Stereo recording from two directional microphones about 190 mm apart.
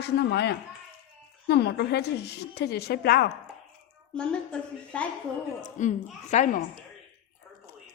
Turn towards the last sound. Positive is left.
turn(degrees=40)  # may be behind; listen again after turning